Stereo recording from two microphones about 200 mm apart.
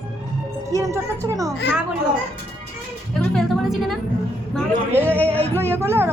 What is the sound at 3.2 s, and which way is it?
Music, centre (ahead or behind).